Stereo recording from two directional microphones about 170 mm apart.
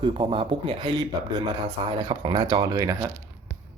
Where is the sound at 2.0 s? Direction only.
25° right (ahead or behind).